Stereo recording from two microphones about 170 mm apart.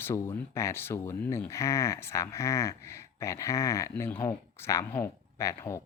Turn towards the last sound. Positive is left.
turn(degrees=15)  # may be behind; listen again after turning